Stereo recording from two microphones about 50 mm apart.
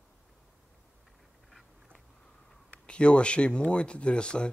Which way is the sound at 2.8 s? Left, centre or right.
Left.